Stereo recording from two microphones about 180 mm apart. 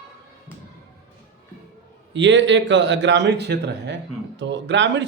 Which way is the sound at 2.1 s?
85° right.